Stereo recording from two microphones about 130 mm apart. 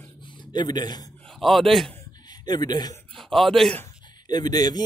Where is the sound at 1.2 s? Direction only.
5° left (ahead or behind).